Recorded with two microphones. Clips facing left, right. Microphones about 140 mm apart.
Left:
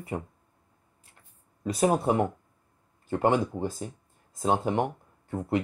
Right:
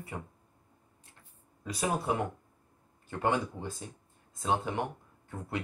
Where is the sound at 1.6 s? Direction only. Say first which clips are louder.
Left 8 dB; 40° left (ahead or behind).